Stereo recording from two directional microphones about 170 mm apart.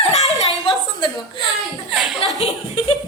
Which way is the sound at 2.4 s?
35° left (ahead or behind).